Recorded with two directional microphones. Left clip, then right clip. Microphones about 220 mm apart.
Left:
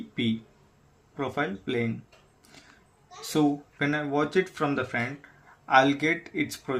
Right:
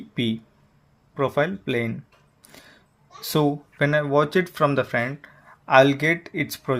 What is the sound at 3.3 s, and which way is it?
Speech, 40° right (ahead or behind).